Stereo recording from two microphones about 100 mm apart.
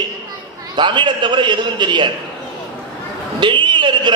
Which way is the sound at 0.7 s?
50° right (ahead or behind).